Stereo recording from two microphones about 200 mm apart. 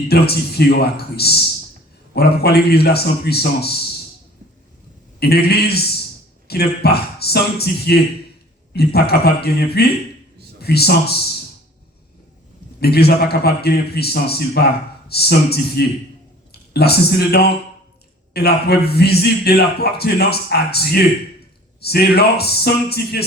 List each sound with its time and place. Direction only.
0.1 s a man's voice: 55° left (ahead or behind)
5.2 s a man's voice: 50° left (ahead or behind)
12.8 s a man's voice: 50° left (ahead or behind)